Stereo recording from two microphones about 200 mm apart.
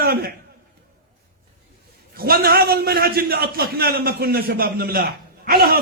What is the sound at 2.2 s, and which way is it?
Speech, 50° right (ahead or behind).